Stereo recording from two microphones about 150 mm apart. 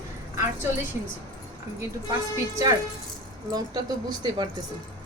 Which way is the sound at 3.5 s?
25° right (ahead or behind).